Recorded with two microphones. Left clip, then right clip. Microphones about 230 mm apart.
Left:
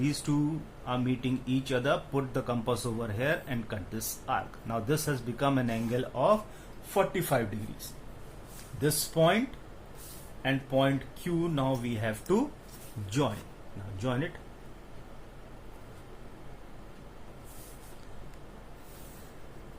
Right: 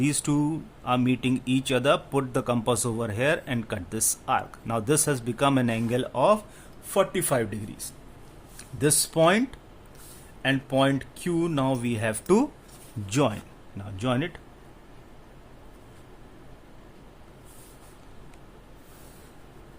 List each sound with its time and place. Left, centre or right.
0.0 s speech: right
8.8 s speech: right
10.4 s speech: right